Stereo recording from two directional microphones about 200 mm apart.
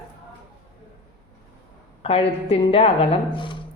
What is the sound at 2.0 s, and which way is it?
A woman's voice, 30° left (ahead or behind).